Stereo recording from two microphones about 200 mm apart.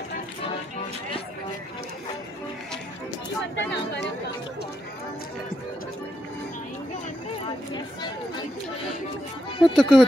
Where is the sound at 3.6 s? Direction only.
60° left (ahead or behind).